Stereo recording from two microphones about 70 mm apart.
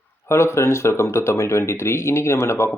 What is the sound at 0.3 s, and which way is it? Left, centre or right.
Speech, left.